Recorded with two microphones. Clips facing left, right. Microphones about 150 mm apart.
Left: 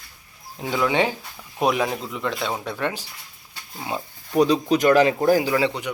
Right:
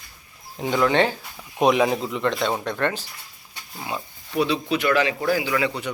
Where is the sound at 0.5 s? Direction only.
Centre (ahead or behind).